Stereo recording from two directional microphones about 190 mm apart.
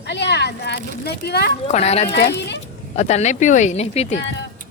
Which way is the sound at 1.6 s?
35° left (ahead or behind).